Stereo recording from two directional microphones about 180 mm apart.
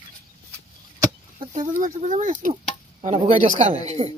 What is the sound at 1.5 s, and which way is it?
Speech, 45° right (ahead or behind).